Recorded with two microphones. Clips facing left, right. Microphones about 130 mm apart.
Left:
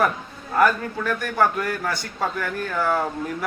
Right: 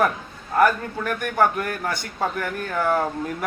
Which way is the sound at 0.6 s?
15° right (ahead or behind).